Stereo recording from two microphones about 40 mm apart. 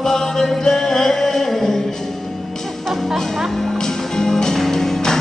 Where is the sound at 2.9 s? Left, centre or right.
Centre.